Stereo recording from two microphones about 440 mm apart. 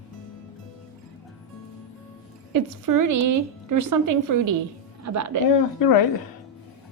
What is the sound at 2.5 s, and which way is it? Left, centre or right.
A woman's voice, right.